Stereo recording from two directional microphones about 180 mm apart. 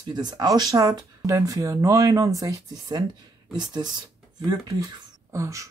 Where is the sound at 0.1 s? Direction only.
25° right (ahead or behind).